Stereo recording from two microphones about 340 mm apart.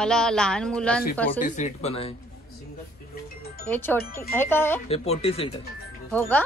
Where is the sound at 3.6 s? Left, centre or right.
Centre.